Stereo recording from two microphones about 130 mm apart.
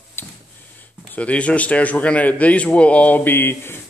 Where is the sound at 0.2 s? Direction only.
15° left (ahead or behind).